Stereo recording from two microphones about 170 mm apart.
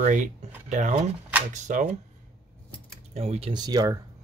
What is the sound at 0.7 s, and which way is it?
Speech, 45° right (ahead or behind).